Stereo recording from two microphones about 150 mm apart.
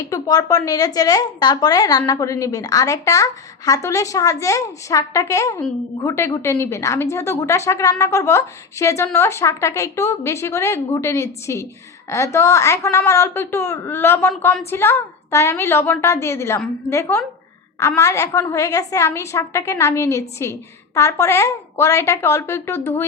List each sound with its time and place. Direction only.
0.1 s a woman's voice: 25° left (ahead or behind)